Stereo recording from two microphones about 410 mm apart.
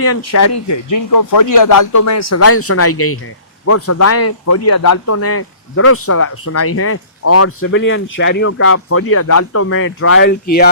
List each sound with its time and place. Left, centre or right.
0.0 s speech: left